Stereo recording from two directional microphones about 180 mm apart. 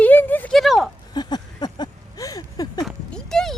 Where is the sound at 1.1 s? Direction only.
25° left (ahead or behind).